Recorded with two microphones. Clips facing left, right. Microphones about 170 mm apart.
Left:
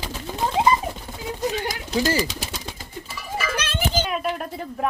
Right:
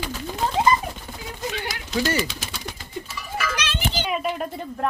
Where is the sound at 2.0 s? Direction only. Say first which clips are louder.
Left 1 dB; 30° left (ahead or behind).